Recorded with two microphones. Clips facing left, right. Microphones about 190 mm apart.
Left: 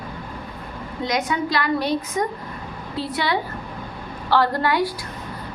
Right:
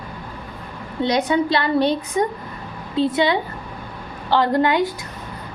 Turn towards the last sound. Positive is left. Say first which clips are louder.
# right 3 dB
turn(degrees=-20)  # may be behind; listen again after turning